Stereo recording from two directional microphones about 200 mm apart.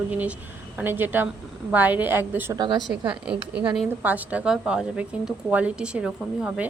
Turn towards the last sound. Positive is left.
turn(degrees=-5)  # may be behind; listen again after turning